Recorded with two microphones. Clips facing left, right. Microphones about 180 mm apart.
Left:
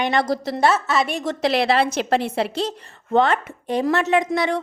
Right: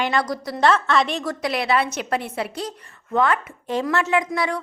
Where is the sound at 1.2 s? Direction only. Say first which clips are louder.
Left 5 dB; 25° left (ahead or behind).